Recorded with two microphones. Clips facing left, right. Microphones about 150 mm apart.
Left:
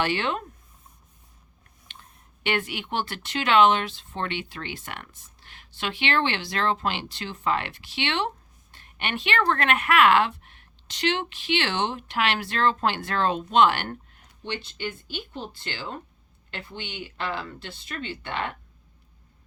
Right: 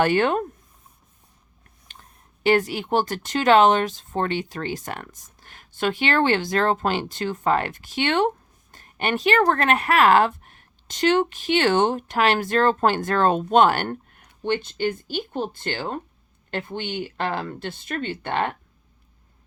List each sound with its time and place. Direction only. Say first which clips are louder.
0.0 s speech: right 7 dB; 50° right (ahead or behind)
1.9 s speech: right 1 dB; 40° right (ahead or behind)